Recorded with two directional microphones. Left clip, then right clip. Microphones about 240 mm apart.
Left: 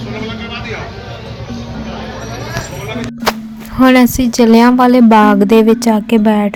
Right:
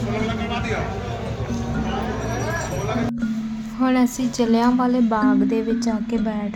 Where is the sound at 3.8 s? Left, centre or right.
Left.